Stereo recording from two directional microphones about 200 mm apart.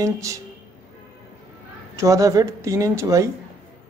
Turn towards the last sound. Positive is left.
turn(degrees=-15)  # may be behind; listen again after turning